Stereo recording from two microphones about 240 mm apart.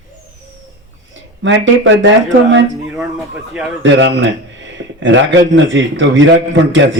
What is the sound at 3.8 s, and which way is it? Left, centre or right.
A man's voice, right.